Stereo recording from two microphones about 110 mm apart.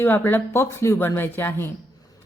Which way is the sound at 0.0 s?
20° left (ahead or behind).